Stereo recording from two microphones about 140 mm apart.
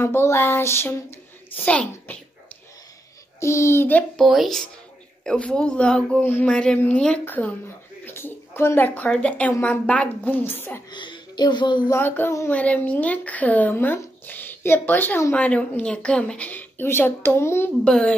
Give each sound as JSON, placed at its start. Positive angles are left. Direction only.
{"t": 0.0, "sound": "a child's voice", "side_deg": 20}
{"t": 3.3, "sound": "a child's voice", "side_deg": 20}
{"t": 4.2, "sound": "speech", "side_deg": 0}
{"t": 10.9, "sound": "a woman's voice", "side_deg": 35}
{"t": 11.9, "sound": "speech", "side_deg": 15}
{"t": 17.8, "sound": "speech", "side_deg": 5}